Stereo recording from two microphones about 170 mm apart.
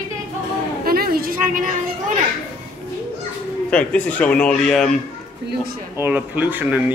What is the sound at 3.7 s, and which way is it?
Speech, 10° left (ahead or behind).